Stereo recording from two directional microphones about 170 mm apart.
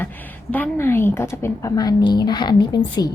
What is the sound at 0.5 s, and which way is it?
A woman's voice, 10° left (ahead or behind).